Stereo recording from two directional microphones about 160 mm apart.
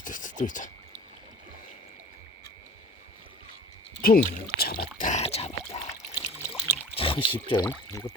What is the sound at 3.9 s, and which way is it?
Speech, 65° left (ahead or behind).